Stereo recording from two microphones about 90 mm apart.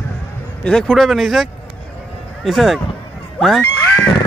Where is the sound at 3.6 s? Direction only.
25° left (ahead or behind).